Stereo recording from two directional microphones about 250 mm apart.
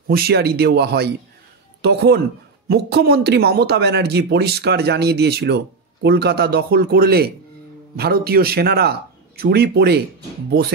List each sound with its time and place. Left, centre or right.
0.1 s a man's voice: right